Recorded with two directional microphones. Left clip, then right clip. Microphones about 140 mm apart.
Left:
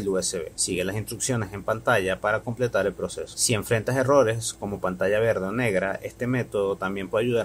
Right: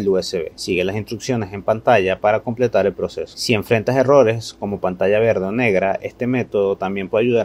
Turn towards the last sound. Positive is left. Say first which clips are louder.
# right 7 dB
turn(degrees=-20)  # may be behind; listen again after turning